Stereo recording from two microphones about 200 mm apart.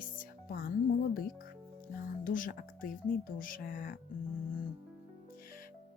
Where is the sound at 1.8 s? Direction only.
45° left (ahead or behind).